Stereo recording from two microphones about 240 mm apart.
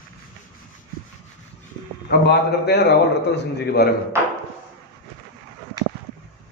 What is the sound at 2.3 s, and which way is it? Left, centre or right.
A man's voice, left.